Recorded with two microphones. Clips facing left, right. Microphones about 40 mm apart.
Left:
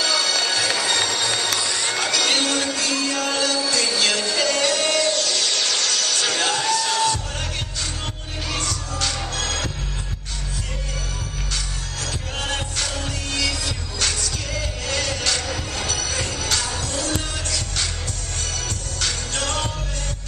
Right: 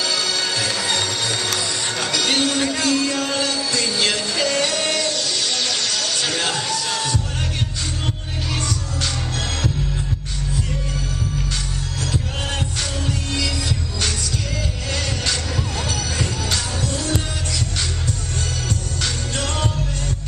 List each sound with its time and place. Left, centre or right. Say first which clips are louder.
0.0 s music: left 1 dB; centre
8.5 s music: right 1 dB; centre
12.0 s music: right 2 dB; centre
18.9 s music: left 3 dB; centre